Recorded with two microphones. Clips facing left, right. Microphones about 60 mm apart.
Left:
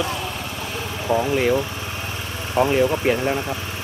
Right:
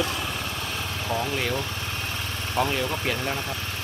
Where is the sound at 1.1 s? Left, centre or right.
Centre.